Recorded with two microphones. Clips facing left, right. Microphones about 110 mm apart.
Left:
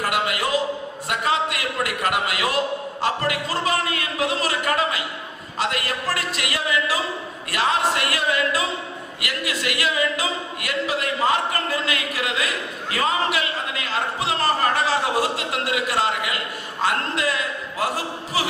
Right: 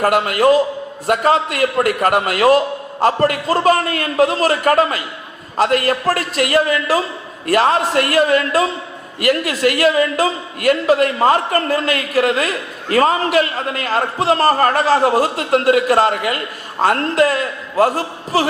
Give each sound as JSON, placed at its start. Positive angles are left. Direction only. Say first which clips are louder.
{"t": 0.0, "sound": "a man's voice", "louder": "right 10 dB", "side_deg": -45}